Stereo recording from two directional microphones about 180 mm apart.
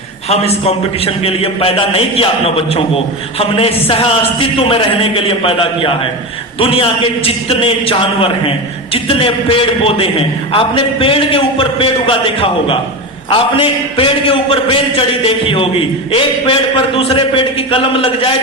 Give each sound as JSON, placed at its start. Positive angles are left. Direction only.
{"t": 0.3, "sound": "a man's voice", "side_deg": 35}